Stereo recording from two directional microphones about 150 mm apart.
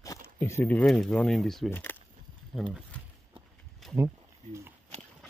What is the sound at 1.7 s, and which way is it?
Speech, 15° left (ahead or behind).